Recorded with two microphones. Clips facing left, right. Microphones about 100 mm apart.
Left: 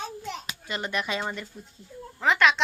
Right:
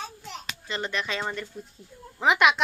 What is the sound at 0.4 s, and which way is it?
Speech, 10° left (ahead or behind).